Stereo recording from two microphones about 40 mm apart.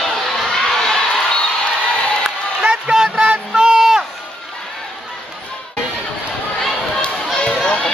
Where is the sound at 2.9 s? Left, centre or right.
Centre.